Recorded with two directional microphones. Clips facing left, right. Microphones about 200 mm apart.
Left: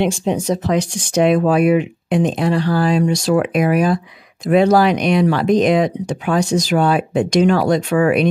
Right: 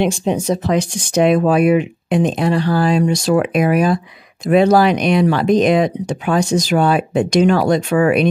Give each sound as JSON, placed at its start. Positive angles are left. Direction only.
{"t": 0.0, "sound": "speech", "side_deg": -25}